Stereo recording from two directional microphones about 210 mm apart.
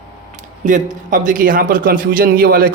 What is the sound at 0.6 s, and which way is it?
Speech, 40° right (ahead or behind).